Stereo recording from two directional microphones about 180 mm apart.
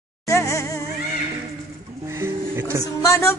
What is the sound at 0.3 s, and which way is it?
Music, 15° left (ahead or behind).